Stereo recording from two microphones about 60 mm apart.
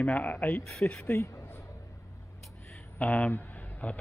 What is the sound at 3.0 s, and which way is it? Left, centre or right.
Speech, left.